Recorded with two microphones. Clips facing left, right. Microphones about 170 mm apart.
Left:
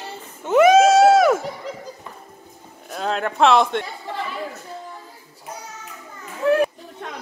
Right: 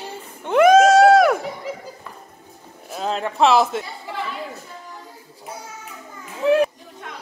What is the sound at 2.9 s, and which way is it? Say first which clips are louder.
Speech: left 1 dB; centre (ahead or behind).